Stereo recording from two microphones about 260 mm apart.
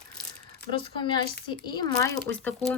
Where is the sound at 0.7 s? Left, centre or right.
Centre.